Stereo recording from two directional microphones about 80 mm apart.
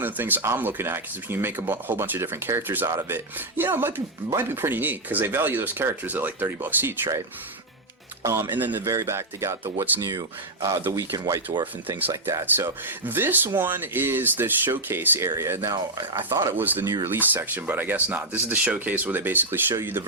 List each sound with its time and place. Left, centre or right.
0.0 s speech: right
8.2 s speech: right
8.4 s speech: right
8.8 s speech: right
11.9 s speech: right
12.3 s speech: right
16.8 s speech: right
17.1 s speech: right